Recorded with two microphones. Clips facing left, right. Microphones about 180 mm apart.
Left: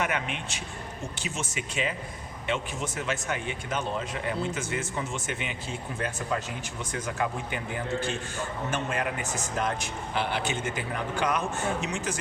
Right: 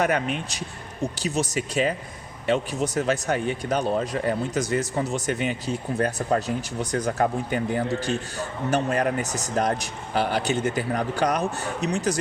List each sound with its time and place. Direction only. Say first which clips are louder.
0.0 s speech: right 7 dB; 40° right (ahead or behind)